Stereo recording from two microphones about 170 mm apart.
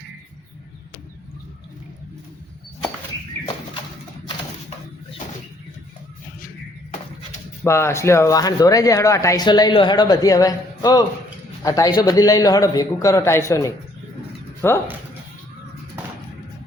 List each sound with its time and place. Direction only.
7.6 s speech: 15° left (ahead or behind)